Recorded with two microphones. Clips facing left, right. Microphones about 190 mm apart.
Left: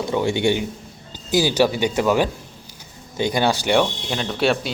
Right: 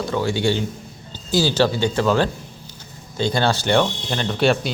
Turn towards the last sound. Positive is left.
turn(degrees=0)  # may be behind; listen again after turning